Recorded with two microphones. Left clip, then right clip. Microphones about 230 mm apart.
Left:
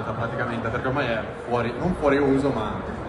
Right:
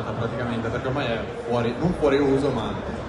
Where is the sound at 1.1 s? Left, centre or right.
Centre.